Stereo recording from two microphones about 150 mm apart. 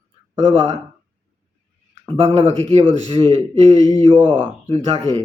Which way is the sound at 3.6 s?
25° left (ahead or behind).